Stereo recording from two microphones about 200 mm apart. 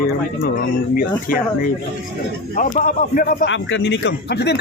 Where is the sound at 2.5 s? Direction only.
40° left (ahead or behind).